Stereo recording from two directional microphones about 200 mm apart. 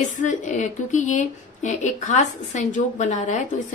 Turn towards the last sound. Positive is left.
turn(degrees=35)  # may be behind; listen again after turning